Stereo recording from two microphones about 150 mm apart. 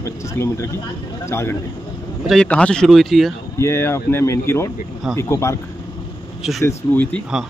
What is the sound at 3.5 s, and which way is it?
Speech, 15° left (ahead or behind).